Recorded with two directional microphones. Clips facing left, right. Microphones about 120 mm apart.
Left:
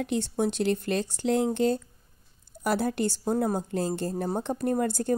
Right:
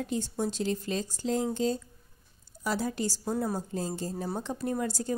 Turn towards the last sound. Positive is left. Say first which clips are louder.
# left 5 dB
turn(degrees=55)  # may be behind; listen again after turning